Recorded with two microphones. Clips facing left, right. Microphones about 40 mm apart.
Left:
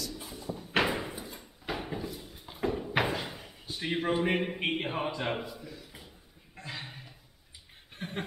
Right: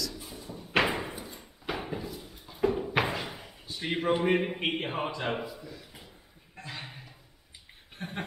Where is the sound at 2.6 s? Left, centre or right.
Centre.